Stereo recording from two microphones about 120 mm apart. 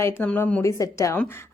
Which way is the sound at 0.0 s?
20° left (ahead or behind).